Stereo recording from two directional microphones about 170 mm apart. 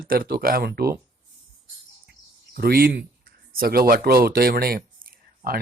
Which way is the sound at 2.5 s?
65° right (ahead or behind).